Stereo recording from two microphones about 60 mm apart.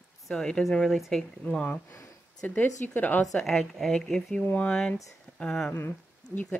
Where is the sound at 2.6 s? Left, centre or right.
Left.